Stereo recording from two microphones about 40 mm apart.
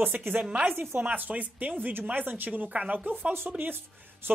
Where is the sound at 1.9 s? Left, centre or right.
Right.